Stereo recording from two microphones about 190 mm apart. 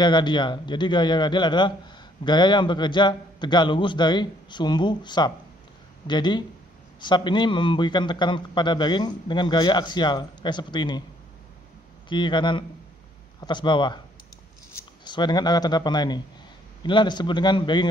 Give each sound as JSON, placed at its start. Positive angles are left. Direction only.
{"t": 0.0, "sound": "a man's voice", "side_deg": 25}
{"t": 12.1, "sound": "a man's voice", "side_deg": 25}